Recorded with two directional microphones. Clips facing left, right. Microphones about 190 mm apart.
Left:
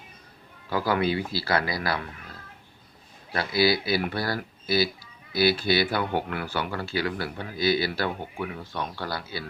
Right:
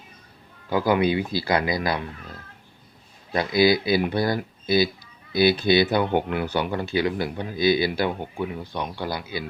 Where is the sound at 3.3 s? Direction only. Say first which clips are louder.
Right 4 dB; 20° right (ahead or behind).